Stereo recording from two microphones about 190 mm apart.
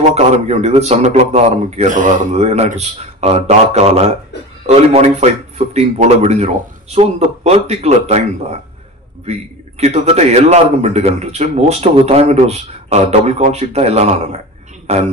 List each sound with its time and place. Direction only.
0.1 s a man's voice: 35° right (ahead or behind)